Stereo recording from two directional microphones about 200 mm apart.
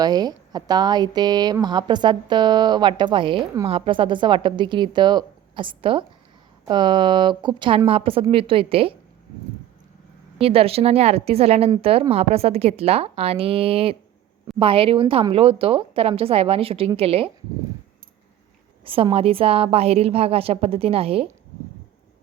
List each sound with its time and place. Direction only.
0.0 s speech: 20° right (ahead or behind)
10.3 s speech: 30° right (ahead or behind)
18.9 s speech: 25° right (ahead or behind)